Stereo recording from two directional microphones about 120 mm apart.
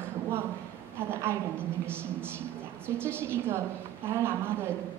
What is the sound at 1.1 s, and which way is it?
Speech, 20° right (ahead or behind).